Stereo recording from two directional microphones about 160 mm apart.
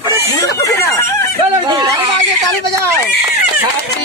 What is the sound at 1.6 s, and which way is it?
Speech, 25° right (ahead or behind).